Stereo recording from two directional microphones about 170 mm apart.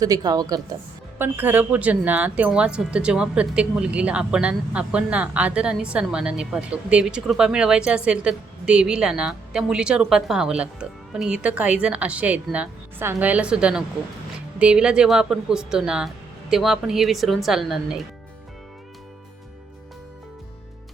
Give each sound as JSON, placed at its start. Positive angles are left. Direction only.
{"t": 0.0, "sound": "a woman's voice", "side_deg": -20}
{"t": 1.2, "sound": "speech", "side_deg": -10}